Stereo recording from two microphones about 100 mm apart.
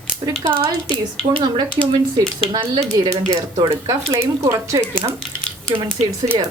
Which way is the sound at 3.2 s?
90° right.